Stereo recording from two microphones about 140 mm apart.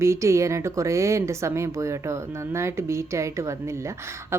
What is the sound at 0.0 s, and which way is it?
Speech, 20° right (ahead or behind).